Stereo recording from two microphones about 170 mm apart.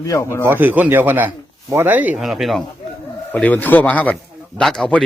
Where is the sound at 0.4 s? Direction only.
10° right (ahead or behind).